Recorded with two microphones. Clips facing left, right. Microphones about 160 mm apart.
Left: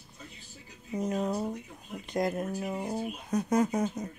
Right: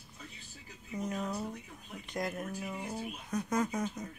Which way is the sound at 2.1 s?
35° left (ahead or behind).